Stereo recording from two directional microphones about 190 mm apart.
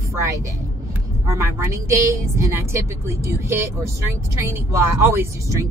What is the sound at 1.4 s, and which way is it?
Speech, 15° right (ahead or behind).